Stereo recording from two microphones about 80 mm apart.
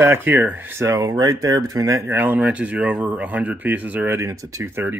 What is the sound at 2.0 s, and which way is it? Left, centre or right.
Speech, right.